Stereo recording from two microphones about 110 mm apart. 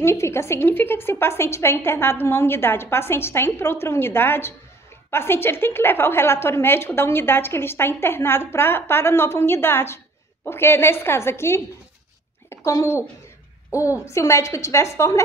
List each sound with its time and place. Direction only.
0.0 s a woman's voice: 25° left (ahead or behind)
12.4 s a sound: 30° left (ahead or behind)
14.0 s a woman's voice: 25° left (ahead or behind)